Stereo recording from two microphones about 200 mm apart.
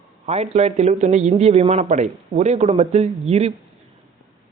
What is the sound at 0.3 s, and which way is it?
Speech, 30° right (ahead or behind).